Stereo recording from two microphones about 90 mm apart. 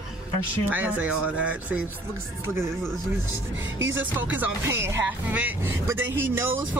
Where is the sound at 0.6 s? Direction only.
20° right (ahead or behind).